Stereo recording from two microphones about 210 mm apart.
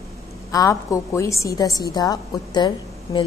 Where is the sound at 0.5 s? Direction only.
15° left (ahead or behind).